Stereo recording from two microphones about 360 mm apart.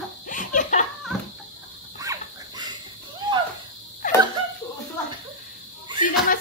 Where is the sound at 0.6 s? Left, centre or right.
Left.